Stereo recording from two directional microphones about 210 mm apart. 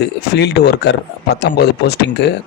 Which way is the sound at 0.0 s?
50° left (ahead or behind).